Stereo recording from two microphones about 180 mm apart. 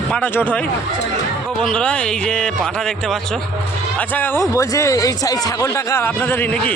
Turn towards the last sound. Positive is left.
turn(degrees=15)  # may be behind; listen again after turning